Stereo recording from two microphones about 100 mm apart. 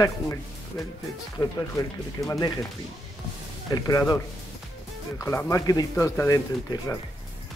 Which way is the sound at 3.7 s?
40° left (ahead or behind).